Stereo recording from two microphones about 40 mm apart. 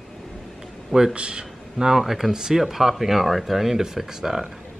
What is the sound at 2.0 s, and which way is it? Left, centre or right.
Speech, centre.